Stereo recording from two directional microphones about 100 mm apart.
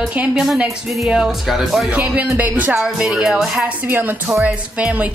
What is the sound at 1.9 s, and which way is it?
Speech, 15° right (ahead or behind).